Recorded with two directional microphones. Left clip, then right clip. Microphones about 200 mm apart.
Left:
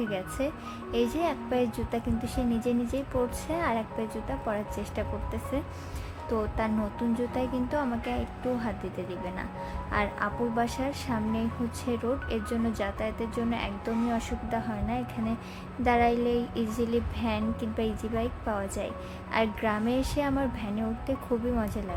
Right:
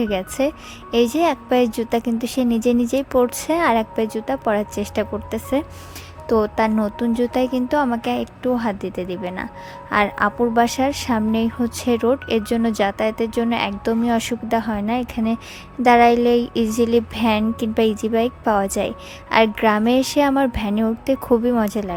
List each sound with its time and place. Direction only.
0.0 s a woman's voice: 50° right (ahead or behind)